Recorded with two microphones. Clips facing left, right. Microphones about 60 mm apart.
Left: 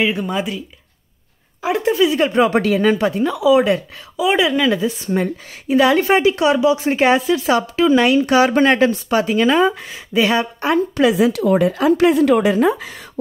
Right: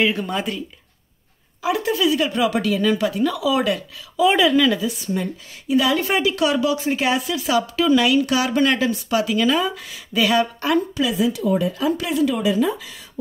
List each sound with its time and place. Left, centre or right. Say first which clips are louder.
0.0 s a woman's voice: left 2 dB; centre
1.6 s speech: left 4 dB; left
4.7 s speech: left 5 dB; left
6.0 s speech: left 5 dB; left
11.0 s speech: left 6 dB; left